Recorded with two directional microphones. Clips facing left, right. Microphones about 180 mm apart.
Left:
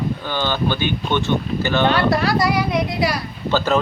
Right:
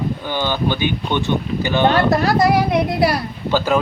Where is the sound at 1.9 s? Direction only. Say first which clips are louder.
Right 2 dB; 45° right (ahead or behind).